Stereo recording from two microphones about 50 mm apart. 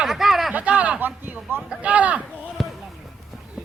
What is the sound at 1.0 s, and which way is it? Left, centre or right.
Speech, right.